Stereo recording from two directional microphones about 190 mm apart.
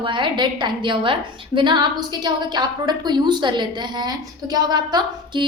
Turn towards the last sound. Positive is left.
turn(degrees=-20)  # may be behind; listen again after turning